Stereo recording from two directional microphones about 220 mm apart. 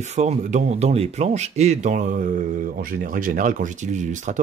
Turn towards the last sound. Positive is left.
turn(degrees=-35)  # may be behind; listen again after turning